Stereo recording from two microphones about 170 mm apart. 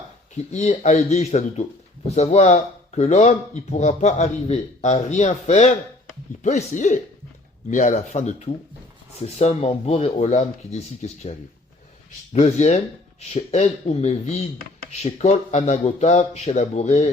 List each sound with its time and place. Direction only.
0.5 s speech: 45° left (ahead or behind)